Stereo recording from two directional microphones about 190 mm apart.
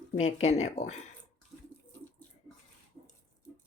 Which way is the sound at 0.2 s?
35° left (ahead or behind).